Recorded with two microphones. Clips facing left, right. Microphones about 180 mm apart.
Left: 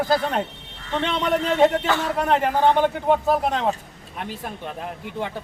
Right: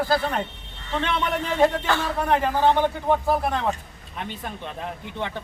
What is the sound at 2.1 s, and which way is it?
A man's voice, 15° left (ahead or behind).